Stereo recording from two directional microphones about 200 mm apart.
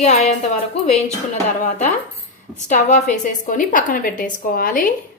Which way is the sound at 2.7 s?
40° left (ahead or behind).